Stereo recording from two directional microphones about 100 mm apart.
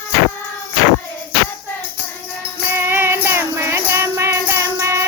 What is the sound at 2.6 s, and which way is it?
Music, 25° right (ahead or behind).